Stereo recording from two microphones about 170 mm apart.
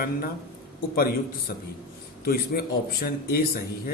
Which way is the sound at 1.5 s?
60° left (ahead or behind).